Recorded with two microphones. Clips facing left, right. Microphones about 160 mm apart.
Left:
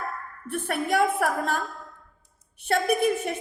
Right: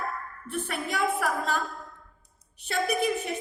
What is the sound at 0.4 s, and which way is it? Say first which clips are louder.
A woman's voice: left 5 dB; 55° left (ahead or behind).